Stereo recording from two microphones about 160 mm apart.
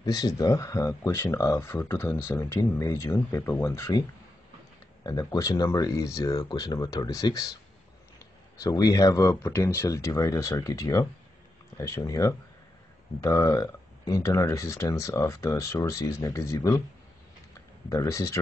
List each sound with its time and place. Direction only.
0.0 s speech: 25° left (ahead or behind)
5.0 s speech: 20° left (ahead or behind)
8.5 s speech: 25° left (ahead or behind)
17.8 s speech: 20° left (ahead or behind)